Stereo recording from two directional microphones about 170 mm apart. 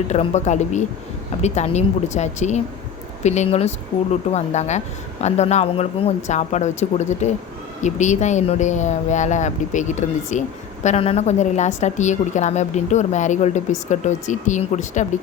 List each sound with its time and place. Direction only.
0.1 s a woman's voice: 40° left (ahead or behind)